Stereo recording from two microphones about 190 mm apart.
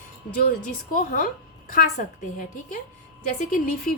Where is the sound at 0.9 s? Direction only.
45° left (ahead or behind).